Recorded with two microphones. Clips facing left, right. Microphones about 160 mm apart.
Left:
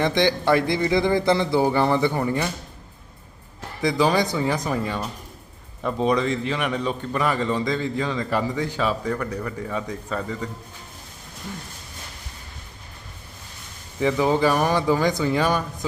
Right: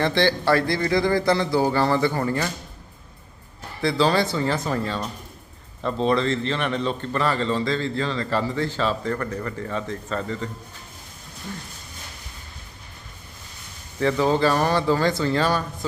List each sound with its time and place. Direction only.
0.0 s speech: 15° left (ahead or behind)
3.8 s a man's voice: 15° left (ahead or behind)
14.0 s a man's voice: 15° left (ahead or behind)